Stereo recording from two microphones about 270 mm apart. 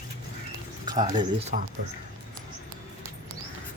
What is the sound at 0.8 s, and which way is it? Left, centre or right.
Speech, centre.